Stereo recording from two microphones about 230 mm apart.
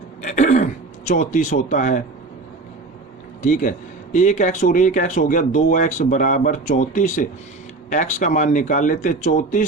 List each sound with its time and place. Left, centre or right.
0.3 s speech: left
3.4 s speech: left